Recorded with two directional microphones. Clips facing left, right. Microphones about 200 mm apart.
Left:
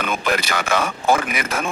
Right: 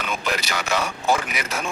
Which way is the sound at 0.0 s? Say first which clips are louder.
Left 5 dB; 55° left (ahead or behind).